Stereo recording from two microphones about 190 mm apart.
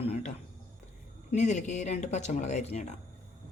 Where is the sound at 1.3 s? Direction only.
40° left (ahead or behind).